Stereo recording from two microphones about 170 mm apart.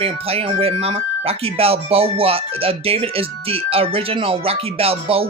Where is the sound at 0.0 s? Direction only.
35° right (ahead or behind).